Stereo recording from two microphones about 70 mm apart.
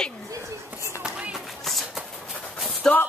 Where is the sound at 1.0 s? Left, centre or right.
Centre.